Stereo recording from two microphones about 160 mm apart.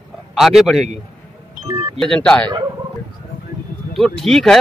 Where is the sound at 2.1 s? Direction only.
5° left (ahead or behind).